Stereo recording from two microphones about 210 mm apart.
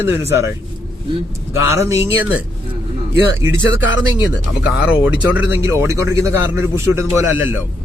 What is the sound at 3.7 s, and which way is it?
Speech, 60° left (ahead or behind).